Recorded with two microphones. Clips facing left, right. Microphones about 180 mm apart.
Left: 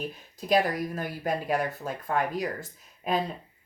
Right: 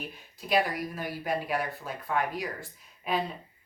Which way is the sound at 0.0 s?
40° left (ahead or behind).